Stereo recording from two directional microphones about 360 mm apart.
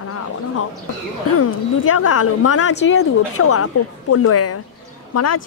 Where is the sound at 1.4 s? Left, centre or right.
Left.